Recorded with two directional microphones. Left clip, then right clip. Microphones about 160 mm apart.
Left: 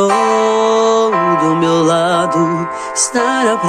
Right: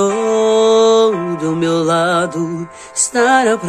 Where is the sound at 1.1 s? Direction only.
35° left (ahead or behind).